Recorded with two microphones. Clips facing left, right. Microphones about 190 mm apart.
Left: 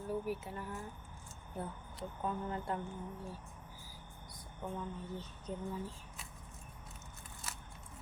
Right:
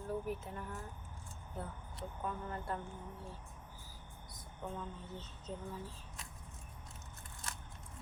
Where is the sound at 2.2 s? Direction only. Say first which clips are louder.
Left 3 dB; 20° left (ahead or behind).